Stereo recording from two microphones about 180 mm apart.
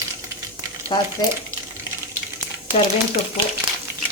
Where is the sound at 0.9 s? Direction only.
25° left (ahead or behind).